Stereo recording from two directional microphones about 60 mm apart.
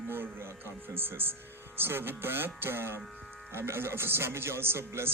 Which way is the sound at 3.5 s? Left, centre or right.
Right.